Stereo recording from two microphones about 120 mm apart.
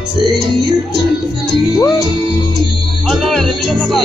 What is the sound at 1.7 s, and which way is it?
Music, 30° left (ahead or behind).